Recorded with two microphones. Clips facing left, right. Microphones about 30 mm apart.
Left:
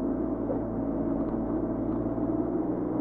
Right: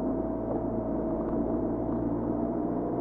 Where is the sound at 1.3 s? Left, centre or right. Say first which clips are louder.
Even; centre.